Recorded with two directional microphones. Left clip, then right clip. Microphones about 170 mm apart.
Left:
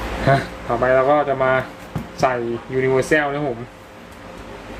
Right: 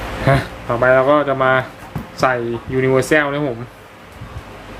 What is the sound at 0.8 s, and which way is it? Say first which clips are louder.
Speech: right 3 dB; 30° right (ahead or behind).